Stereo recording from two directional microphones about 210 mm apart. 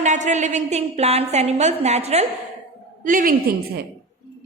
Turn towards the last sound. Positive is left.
turn(degrees=-40)  # may be behind; listen again after turning